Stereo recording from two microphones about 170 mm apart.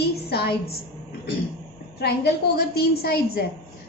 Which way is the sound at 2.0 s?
75° left (ahead or behind).